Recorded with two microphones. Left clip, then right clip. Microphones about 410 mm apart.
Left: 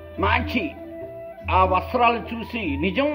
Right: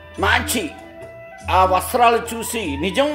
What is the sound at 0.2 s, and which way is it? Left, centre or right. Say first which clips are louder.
A man's voice: right 4 dB; right.